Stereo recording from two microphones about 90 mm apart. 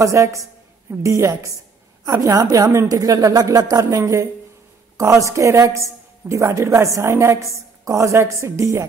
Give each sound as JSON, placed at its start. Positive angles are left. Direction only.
{"t": 0.0, "sound": "a woman's voice", "side_deg": -35}